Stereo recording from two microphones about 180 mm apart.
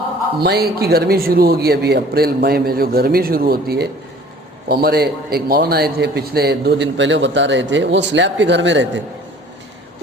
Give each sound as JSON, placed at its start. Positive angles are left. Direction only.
{"t": 0.3, "sound": "speech", "side_deg": -65}